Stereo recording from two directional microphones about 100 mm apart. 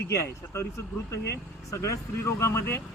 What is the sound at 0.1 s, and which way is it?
Speech, 30° left (ahead or behind).